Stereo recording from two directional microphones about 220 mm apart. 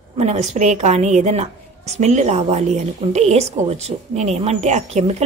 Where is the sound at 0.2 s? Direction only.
30° right (ahead or behind).